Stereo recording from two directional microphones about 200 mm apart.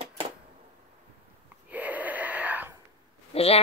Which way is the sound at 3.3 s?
30° left (ahead or behind).